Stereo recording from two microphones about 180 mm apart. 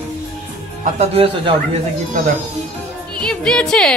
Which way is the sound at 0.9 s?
35° right (ahead or behind).